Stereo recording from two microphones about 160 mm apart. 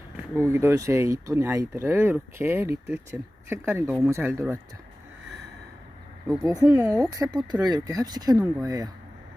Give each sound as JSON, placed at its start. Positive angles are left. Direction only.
{"t": 0.3, "sound": "speech", "side_deg": -15}
{"t": 6.4, "sound": "speech", "side_deg": -20}